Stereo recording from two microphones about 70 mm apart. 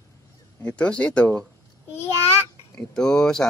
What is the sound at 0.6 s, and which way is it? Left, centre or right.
Speech, centre.